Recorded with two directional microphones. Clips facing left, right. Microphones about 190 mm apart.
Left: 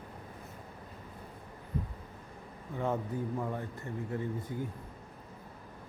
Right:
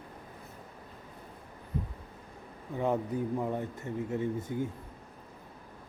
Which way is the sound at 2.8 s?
20° right (ahead or behind).